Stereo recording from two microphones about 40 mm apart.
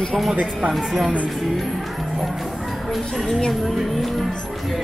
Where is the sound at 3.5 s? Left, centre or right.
Centre.